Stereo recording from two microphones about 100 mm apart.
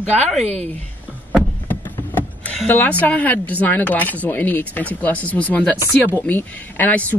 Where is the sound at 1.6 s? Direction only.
20° left (ahead or behind).